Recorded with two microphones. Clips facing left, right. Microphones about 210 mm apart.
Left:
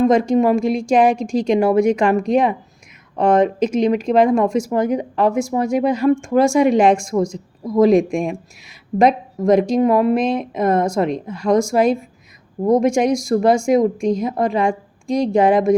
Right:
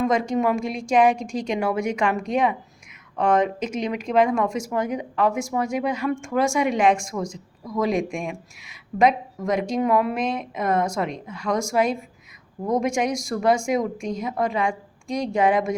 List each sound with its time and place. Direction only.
0.0 s speech: 30° left (ahead or behind)